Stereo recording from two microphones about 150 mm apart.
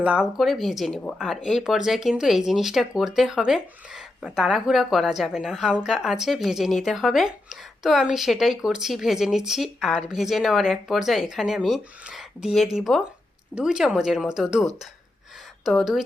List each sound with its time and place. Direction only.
0.0 s speech: 5° right (ahead or behind)